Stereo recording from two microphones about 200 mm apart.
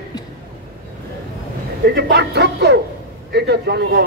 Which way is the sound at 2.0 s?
55° right (ahead or behind).